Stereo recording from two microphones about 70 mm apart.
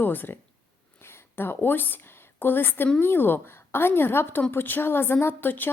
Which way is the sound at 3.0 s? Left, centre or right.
Left.